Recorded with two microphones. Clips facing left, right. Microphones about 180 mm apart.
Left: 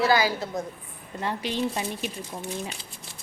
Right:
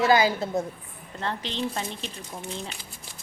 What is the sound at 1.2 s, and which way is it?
Speech, 10° left (ahead or behind).